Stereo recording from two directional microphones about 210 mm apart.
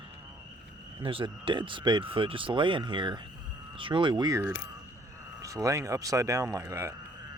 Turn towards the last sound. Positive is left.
turn(degrees=-10)  # may be behind; listen again after turning